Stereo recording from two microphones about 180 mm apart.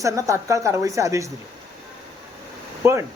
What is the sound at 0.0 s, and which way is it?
Speech, 15° right (ahead or behind).